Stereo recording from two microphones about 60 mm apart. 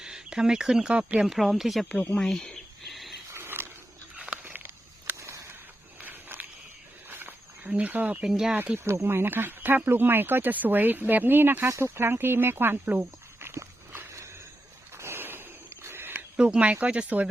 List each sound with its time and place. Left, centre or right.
0.0 s speech: centre
2.1 s a sound: centre
3.3 s mechanisms: right
4.2 s a sound: right
5.1 s a sound: right
6.0 s walk: right
7.7 s speech: right
8.2 s speech: centre
8.8 s speech: right
12.8 s speech: right
14.9 s a sound: right
16.4 s speech: centre